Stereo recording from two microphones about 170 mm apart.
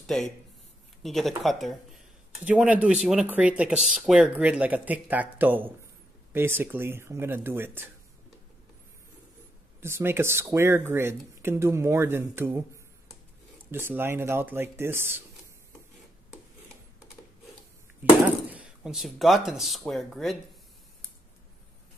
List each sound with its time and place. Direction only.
0.0 s speech: centre (ahead or behind); by 7.9 s 15° right (ahead or behind)
9.8 s speech: 15° right (ahead or behind)
13.7 s speech: 10° right (ahead or behind)
18.5 s speech: 5° right (ahead or behind)